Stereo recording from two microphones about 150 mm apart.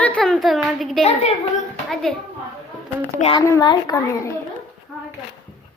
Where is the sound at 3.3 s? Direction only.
25° left (ahead or behind).